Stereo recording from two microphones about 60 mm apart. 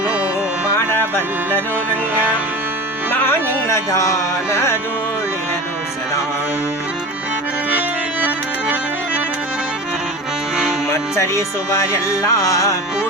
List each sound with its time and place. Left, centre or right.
0.7 s music: left
3.1 s carnatic music: left
7.7 s accordion: right
10.9 s music: left